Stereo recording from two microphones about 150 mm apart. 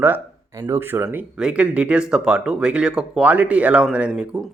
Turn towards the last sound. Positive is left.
turn(degrees=-10)  # may be behind; listen again after turning